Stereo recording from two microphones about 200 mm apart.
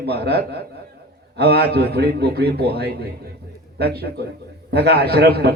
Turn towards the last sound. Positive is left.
turn(degrees=-55)  # may be behind; listen again after turning